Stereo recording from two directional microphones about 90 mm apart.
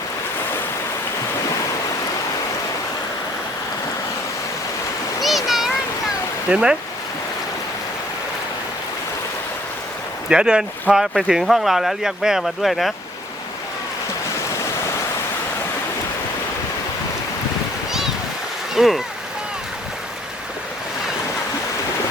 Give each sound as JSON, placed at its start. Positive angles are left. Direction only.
{"t": 5.5, "sound": "a sound", "side_deg": -5}
{"t": 6.5, "sound": "speech", "side_deg": -10}
{"t": 10.2, "sound": "speech", "side_deg": -10}
{"t": 18.7, "sound": "speech", "side_deg": -5}